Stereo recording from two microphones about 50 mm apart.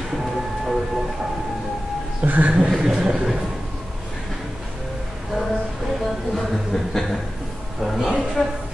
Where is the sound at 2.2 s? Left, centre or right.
Right.